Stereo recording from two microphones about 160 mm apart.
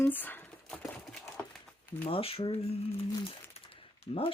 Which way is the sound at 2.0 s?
35° left (ahead or behind).